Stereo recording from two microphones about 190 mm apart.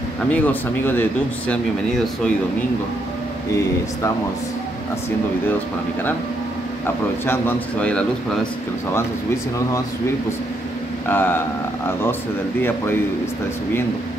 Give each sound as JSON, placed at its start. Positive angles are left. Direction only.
{"t": 0.3, "sound": "a man's voice", "side_deg": 10}
{"t": 7.2, "sound": "a man's voice", "side_deg": 10}
{"t": 11.1, "sound": "a man's voice", "side_deg": 10}